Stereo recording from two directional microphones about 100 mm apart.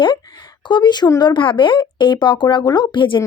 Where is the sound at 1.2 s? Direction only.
55° left (ahead or behind).